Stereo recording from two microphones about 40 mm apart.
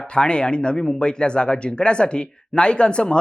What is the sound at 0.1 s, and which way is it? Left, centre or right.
Speech, left.